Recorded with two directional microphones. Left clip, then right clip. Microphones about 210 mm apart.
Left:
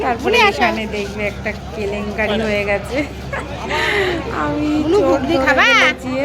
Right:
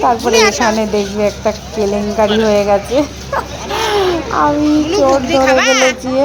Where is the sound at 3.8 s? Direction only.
15° right (ahead or behind).